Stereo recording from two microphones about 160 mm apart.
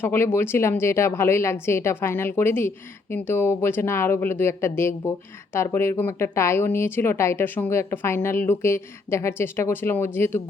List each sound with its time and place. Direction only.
0.0 s speech: 15° left (ahead or behind)